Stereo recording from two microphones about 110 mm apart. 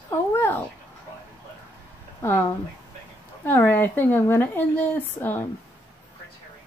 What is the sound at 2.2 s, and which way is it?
A woman's voice, 20° left (ahead or behind).